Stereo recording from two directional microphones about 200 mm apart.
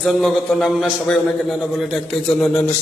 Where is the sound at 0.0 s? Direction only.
Centre (ahead or behind).